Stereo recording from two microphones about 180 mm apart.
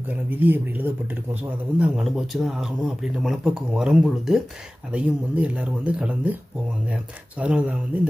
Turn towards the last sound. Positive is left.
turn(degrees=-5)  # may be behind; listen again after turning